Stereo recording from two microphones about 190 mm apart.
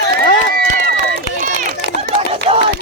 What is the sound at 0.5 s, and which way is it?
Run, 50° right (ahead or behind).